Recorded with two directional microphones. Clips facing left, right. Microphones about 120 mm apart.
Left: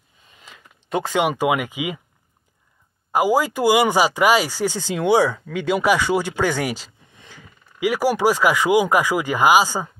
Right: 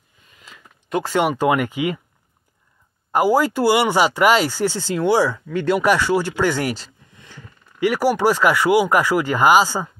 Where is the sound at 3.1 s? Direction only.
15° left (ahead or behind).